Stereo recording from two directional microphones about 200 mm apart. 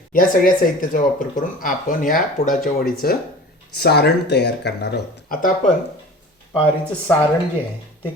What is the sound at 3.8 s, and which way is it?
Speech, 55° left (ahead or behind).